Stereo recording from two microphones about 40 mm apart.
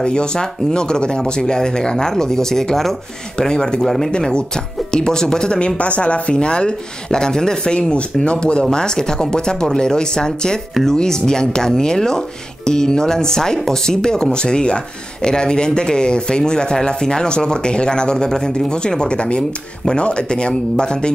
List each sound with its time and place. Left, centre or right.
0.0 s speech: left
3.8 s speech: centre
4.2 s speech: left
5.8 s speech: left
10.7 s speech: centre
11.0 s speech: centre